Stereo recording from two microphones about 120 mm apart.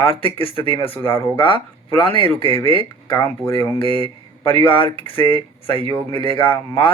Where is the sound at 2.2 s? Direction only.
50° right (ahead or behind).